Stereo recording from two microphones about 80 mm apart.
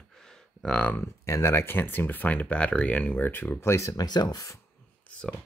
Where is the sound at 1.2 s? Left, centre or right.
Left.